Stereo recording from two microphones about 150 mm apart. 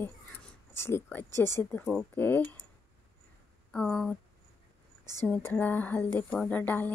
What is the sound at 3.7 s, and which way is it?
Speech, 5° left (ahead or behind).